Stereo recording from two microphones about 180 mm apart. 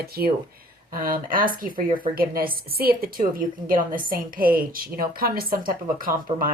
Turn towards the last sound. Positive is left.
turn(degrees=-50)  # may be behind; listen again after turning